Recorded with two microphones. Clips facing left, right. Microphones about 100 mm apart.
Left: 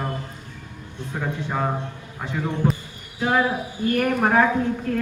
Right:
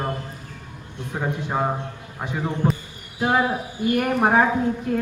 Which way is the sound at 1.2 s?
20° right (ahead or behind).